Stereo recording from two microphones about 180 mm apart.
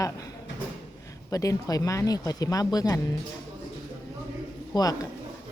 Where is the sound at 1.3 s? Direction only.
20° left (ahead or behind).